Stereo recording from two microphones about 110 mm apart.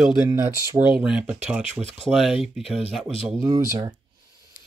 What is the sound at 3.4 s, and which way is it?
Speech, 30° right (ahead or behind).